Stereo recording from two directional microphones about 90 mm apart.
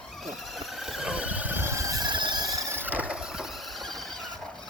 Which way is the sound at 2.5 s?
35° right (ahead or behind).